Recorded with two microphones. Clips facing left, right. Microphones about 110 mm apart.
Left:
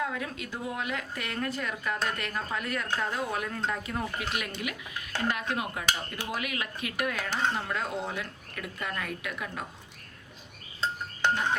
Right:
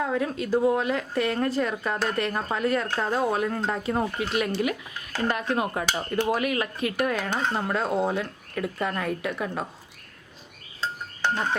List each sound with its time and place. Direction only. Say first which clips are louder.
0.0 s speech: right 7 dB; 35° right (ahead or behind)